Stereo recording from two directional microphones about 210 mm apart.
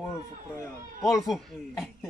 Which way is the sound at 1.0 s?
15° left (ahead or behind).